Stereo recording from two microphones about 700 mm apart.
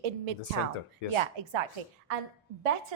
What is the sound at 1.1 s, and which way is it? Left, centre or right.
Speech, right.